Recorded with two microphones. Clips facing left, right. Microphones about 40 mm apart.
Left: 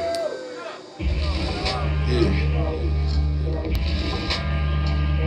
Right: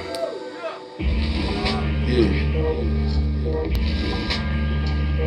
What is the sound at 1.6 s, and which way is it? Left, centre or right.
Music, centre.